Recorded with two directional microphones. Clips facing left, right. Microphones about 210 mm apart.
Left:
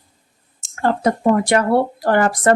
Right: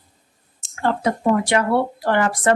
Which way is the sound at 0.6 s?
45° left (ahead or behind).